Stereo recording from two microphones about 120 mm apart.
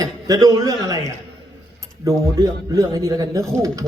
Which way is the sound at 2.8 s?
25° right (ahead or behind).